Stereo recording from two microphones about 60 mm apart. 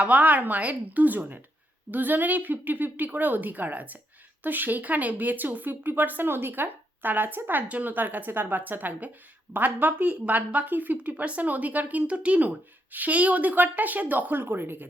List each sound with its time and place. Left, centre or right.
0.0 s speech: right